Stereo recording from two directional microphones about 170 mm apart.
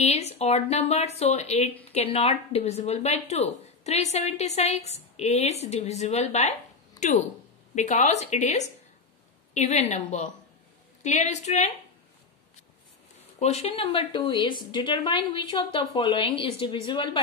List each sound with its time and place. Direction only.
0.0 s a woman's voice: 40° left (ahead or behind)
13.4 s a woman's voice: 40° left (ahead or behind)